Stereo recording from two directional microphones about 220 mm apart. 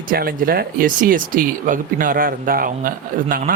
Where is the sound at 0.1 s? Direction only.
40° right (ahead or behind).